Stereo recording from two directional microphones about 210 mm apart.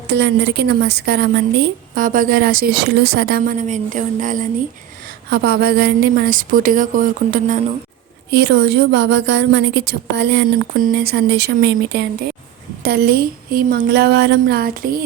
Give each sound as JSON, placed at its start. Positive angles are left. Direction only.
{"t": 0.1, "sound": "a woman's voice", "side_deg": -55}
{"t": 5.5, "sound": "speech", "side_deg": -50}
{"t": 8.3, "sound": "a woman's voice", "side_deg": -55}